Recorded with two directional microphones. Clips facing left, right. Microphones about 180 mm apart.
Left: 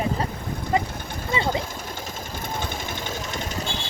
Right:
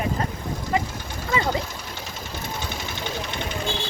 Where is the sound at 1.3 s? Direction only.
25° left (ahead or behind).